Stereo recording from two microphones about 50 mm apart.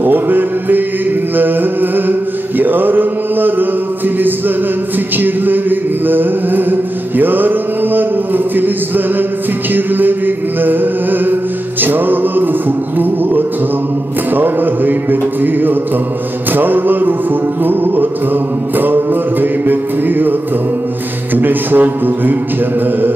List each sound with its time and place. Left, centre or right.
0.0 s mantra: right
1.3 s music: right
5.1 s music: right
21.4 s music: right